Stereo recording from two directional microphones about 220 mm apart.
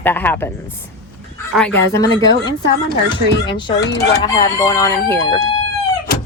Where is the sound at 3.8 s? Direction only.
50° left (ahead or behind).